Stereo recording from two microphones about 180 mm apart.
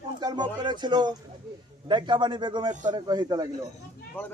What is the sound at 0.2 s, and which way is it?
A man's voice, 25° right (ahead or behind).